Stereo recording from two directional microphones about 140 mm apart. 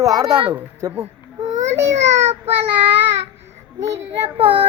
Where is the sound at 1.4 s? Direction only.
55° right (ahead or behind).